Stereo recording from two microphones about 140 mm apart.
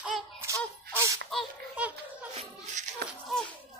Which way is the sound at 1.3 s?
5° left (ahead or behind).